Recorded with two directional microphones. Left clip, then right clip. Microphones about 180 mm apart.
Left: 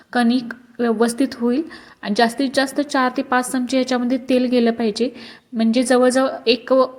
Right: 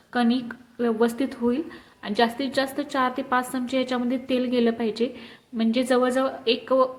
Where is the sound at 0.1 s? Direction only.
35° left (ahead or behind).